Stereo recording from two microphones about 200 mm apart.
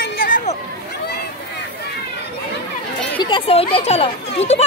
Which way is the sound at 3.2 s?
25° left (ahead or behind).